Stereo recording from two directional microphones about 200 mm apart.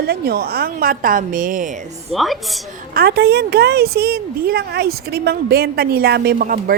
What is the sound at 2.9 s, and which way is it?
Speech, 50° right (ahead or behind).